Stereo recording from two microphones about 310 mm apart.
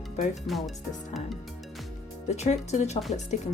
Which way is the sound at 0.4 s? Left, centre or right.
Centre.